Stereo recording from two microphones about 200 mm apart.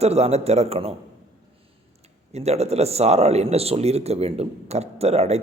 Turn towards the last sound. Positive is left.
turn(degrees=-30)  # may be behind; listen again after turning